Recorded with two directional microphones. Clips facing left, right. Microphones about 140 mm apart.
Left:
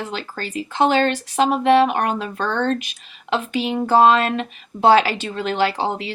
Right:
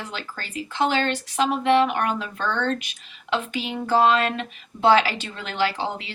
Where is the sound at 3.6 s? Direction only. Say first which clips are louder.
Left 6 dB; 30° left (ahead or behind).